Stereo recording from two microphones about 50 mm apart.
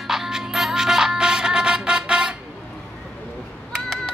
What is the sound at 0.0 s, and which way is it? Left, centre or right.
Music, centre.